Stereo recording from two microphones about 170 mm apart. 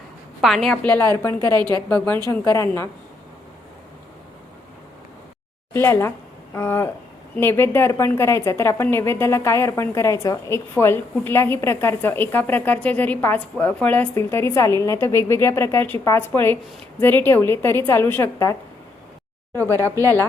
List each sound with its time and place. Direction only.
0.4 s a woman's voice: centre (ahead or behind); by 1.4 s 20° left (ahead or behind)
1.5 s a woman's voice: 25° right (ahead or behind)
1.9 s a woman's voice: 10° left (ahead or behind)
5.7 s a woman's voice: 15° left (ahead or behind)